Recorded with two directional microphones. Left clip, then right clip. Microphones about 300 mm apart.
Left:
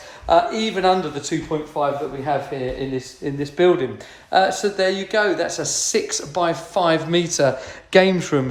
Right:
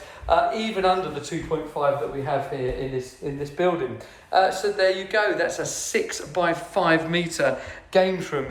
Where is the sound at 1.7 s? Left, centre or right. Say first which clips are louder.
Left 2 dB; left.